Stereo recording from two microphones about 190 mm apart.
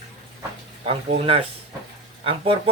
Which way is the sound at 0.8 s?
35° right (ahead or behind).